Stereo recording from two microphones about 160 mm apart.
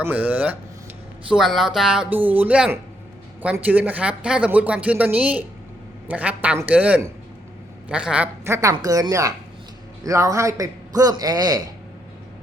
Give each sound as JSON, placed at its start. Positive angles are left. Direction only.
{"t": 0.0, "sound": "a man's voice", "side_deg": -10}